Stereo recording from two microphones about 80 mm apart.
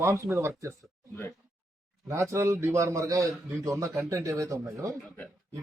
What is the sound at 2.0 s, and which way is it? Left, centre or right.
A man's voice, right.